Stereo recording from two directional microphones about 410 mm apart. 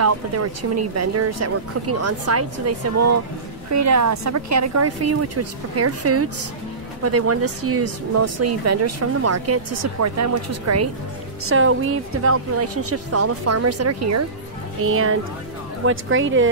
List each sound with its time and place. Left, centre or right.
0.0 s speech: right